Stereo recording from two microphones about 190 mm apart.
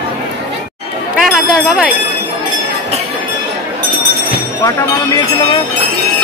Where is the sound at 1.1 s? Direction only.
5° right (ahead or behind).